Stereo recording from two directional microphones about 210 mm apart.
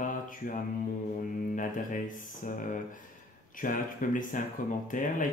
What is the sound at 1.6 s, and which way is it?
Speech, 40° left (ahead or behind).